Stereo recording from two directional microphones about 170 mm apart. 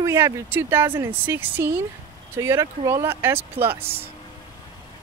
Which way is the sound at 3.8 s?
35° right (ahead or behind).